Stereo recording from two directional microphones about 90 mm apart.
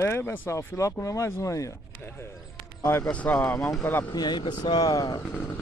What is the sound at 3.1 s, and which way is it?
Speech, 15° left (ahead or behind).